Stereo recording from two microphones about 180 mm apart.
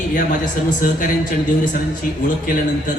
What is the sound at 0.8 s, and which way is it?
A woman's voice, 50° left (ahead or behind).